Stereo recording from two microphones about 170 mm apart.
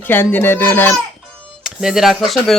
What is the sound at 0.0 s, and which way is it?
Speech, 10° left (ahead or behind).